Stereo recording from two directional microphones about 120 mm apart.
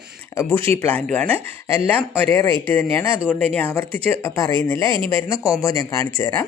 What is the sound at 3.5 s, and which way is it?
Speech, 15° left (ahead or behind).